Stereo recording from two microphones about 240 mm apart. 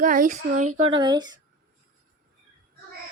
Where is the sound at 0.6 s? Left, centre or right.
Right.